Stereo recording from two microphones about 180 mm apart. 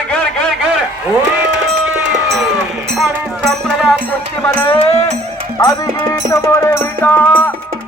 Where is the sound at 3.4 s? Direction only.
Centre (ahead or behind).